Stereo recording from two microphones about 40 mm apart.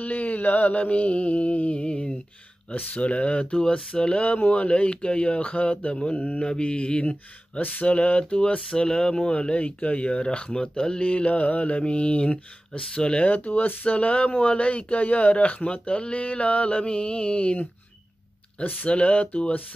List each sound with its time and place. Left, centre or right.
0.0 s speech: left
2.7 s speech: left
13.2 s speech: left
13.8 s speech: left
18.6 s speech: left